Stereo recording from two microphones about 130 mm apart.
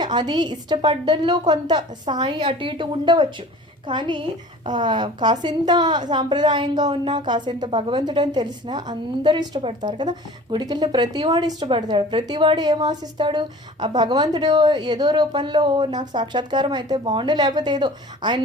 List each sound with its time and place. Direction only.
0.0 s a woman's voice: 35° right (ahead or behind)